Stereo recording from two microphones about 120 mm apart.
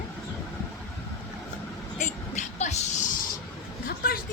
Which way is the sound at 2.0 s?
90° left.